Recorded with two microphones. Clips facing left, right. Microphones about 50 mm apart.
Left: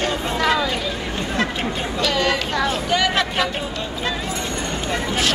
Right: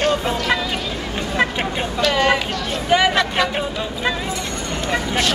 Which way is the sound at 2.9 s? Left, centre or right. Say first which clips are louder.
Right 8 dB; centre.